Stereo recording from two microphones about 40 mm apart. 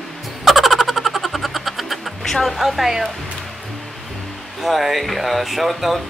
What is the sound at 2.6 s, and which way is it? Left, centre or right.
Speech, centre.